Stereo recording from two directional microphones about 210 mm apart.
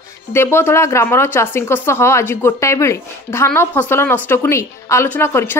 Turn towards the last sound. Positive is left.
turn(degrees=10)  # may be behind; listen again after turning